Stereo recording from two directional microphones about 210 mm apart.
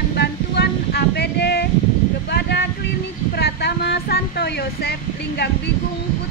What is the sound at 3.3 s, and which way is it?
Speech, 50° left (ahead or behind).